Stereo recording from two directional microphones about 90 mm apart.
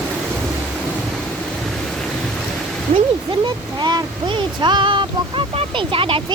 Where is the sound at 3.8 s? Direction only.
60° right (ahead or behind); by 6.2 s 80° right.